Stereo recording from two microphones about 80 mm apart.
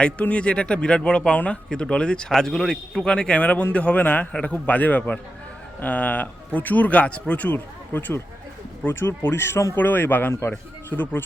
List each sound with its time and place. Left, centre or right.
0.0 s speech: centre